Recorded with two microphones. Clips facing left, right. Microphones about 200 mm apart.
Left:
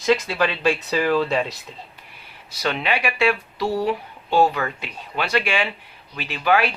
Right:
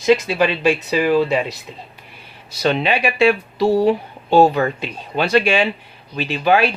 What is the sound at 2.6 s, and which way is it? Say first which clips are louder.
Speech: right 6 dB; 25° right (ahead or behind).